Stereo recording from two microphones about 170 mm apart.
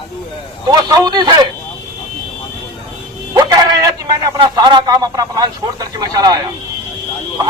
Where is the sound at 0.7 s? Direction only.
20° right (ahead or behind).